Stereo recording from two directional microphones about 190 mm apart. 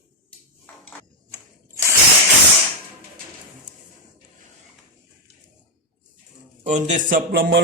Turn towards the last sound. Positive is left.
turn(degrees=-60)  # may be behind; listen again after turning